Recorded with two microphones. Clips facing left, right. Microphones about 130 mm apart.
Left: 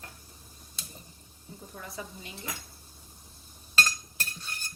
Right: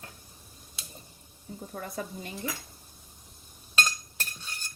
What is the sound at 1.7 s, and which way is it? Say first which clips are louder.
Speech: right 5 dB; 50° right (ahead or behind).